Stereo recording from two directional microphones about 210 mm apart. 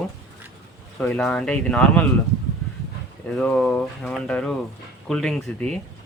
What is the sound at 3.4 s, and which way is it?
Speech, 5° left (ahead or behind).